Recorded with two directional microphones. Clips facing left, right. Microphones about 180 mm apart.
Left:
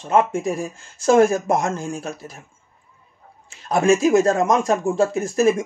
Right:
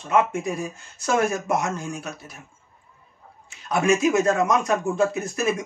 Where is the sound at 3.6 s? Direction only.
35° left (ahead or behind).